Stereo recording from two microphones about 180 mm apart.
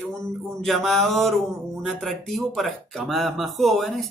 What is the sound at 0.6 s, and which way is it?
A man's voice, centre (ahead or behind).